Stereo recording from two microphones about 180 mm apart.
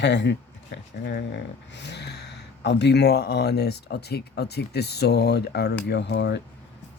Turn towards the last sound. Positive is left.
turn(degrees=70)  # may be behind; listen again after turning